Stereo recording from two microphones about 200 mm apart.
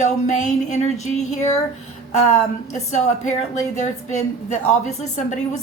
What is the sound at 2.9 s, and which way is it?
A woman's voice, 35° left (ahead or behind).